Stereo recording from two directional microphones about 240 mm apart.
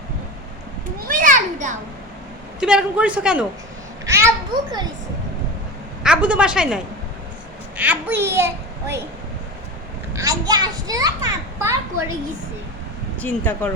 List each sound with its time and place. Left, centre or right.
0.9 s children playing: right
2.6 s a man's voice: centre
6.0 s a woman's voice: centre
7.8 s a child's voice: centre
10.2 s a child's voice: centre
13.2 s speech: centre